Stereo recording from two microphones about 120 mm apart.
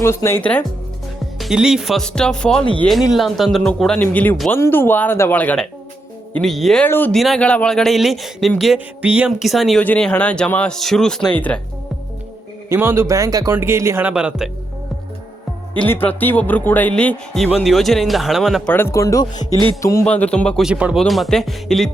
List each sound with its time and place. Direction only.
0.0 s speech: 20° left (ahead or behind)
1.4 s a man's voice: 5° right (ahead or behind); by 5.6 s 10° left (ahead or behind)
6.3 s a man's voice: centre (ahead or behind)
6.8 s speech: 15° left (ahead or behind)
7.1 s a man's voice: centre (ahead or behind)
9.8 s speech: 10° left (ahead or behind)
12.6 s a man's voice: 20° right (ahead or behind)
14.1 s speech: 10° right (ahead or behind)
15.7 s a man's voice: 15° left (ahead or behind); by 18.7 s centre (ahead or behind)
18.7 s speech: 20° left (ahead or behind)
20.1 s speech: 10° left (ahead or behind)
20.6 s a man's voice: 10° right (ahead or behind)
21.0 s a man's voice: centre (ahead or behind)